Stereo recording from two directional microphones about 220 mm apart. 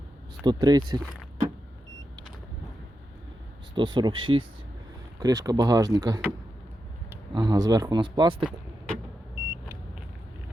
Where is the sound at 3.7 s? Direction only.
20° right (ahead or behind).